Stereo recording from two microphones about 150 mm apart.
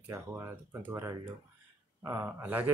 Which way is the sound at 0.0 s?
20° right (ahead or behind).